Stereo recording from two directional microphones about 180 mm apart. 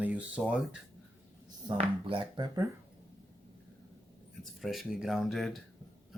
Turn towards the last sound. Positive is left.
turn(degrees=0)  # may be behind; listen again after turning